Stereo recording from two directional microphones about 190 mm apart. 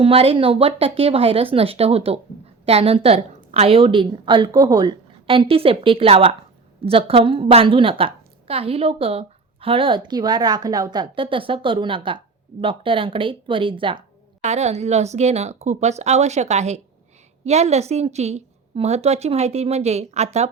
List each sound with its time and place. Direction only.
0.0 s a woman's voice: 30° right (ahead or behind)